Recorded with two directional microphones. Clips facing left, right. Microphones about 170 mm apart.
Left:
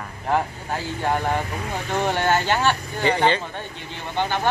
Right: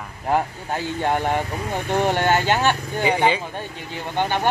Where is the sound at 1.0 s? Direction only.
20° right (ahead or behind).